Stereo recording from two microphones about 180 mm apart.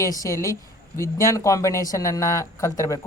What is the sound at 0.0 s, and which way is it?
Speech, 20° left (ahead or behind).